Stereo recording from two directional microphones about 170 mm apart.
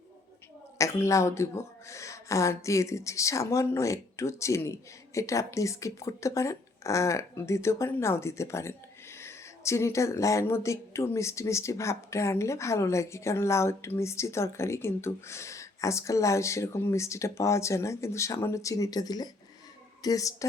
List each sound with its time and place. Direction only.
0.8 s a woman's voice: 20° left (ahead or behind)